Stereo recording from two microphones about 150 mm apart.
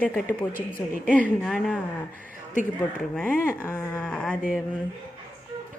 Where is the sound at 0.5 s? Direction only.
70° left (ahead or behind).